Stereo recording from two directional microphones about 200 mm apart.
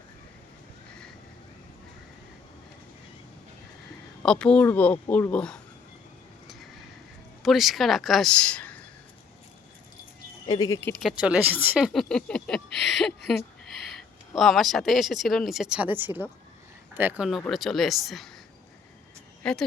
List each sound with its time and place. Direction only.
4.2 s a man's voice: 5° left (ahead or behind)
7.4 s speech: centre (ahead or behind)
10.4 s a man's voice: 20° left (ahead or behind)
11.0 s speech: 5° right (ahead or behind)
19.4 s speech: 5° left (ahead or behind)